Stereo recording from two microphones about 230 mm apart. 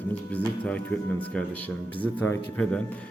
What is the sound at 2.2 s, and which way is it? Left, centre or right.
Speech, centre.